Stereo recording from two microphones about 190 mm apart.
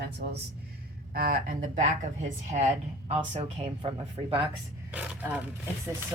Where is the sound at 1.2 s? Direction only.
50° right (ahead or behind); by 3.9 s 30° right (ahead or behind).